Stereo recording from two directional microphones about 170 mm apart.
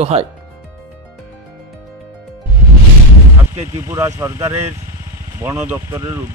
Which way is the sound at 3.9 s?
20° right (ahead or behind).